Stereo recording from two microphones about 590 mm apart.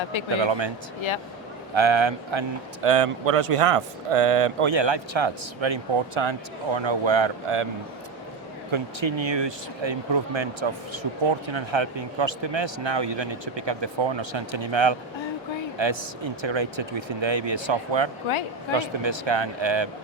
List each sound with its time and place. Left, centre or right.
0.3 s speech: right
1.7 s speech: right
2.8 s speech: right
8.7 s speech: right